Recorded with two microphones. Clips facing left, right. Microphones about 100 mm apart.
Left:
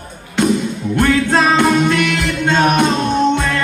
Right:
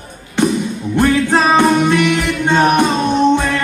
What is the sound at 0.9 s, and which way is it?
Music, 20° right (ahead or behind).